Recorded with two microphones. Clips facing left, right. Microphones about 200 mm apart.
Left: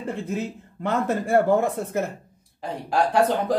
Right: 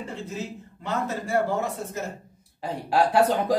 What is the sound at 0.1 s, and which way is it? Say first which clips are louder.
A man's voice: left 5 dB; 55° left (ahead or behind).